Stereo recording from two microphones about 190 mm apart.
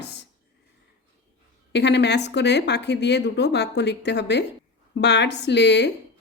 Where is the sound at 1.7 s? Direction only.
65° left (ahead or behind).